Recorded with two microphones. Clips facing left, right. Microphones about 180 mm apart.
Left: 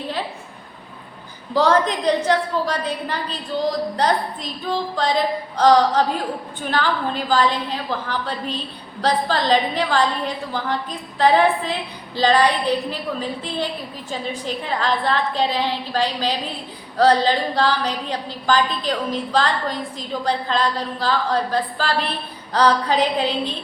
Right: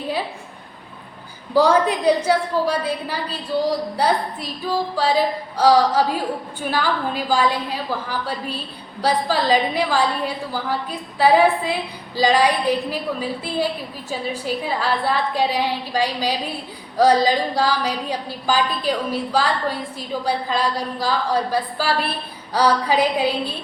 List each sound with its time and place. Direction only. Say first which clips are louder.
1.5 s a woman's voice: right 2 dB; 10° right (ahead or behind)